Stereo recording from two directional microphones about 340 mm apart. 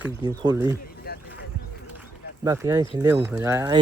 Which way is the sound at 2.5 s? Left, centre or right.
Centre.